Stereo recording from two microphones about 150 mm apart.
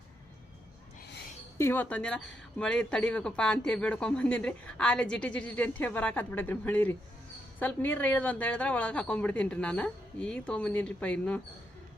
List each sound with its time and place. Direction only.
1.5 s speech: 15° left (ahead or behind)